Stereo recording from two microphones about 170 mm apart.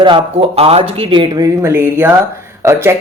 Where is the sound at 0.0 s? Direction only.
30° right (ahead or behind).